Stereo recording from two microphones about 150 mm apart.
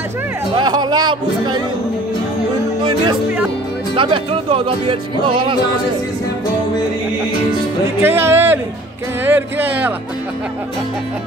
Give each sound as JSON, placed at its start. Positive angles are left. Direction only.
{"t": 0.6, "sound": "speech", "side_deg": -30}
{"t": 3.9, "sound": "speech", "side_deg": -35}
{"t": 8.0, "sound": "speech", "side_deg": -15}